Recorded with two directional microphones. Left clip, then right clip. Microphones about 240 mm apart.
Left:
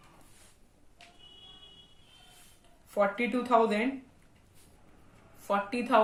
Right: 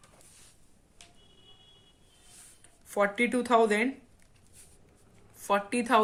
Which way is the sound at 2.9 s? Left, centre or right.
Right.